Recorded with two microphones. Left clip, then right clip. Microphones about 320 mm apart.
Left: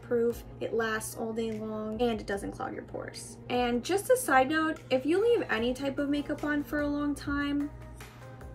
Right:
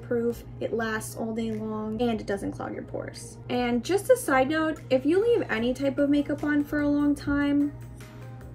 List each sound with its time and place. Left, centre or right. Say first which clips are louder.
0.3 s speech: right 3 dB; centre